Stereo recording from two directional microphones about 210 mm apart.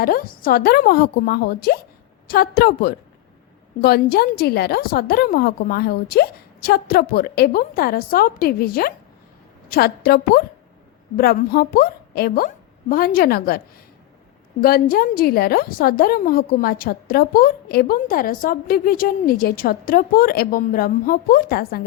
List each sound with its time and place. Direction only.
0.0 s a woman's voice: 45° left (ahead or behind)
14.6 s a woman's voice: 45° left (ahead or behind)